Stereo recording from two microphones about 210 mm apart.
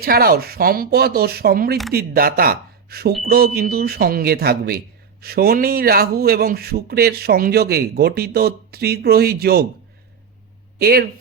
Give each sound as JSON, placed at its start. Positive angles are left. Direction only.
{"t": 0.0, "sound": "a man's voice", "side_deg": -45}
{"t": 10.8, "sound": "speech", "side_deg": -45}